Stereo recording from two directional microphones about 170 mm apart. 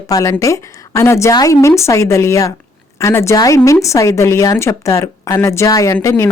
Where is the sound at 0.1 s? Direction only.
20° left (ahead or behind).